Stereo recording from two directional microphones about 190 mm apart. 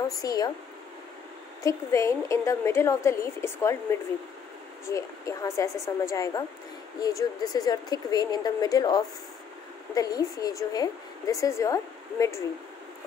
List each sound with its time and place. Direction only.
0.2 s speech: 20° left (ahead or behind)
1.6 s a woman's voice: 15° left (ahead or behind)
4.8 s a woman's voice: 15° left (ahead or behind)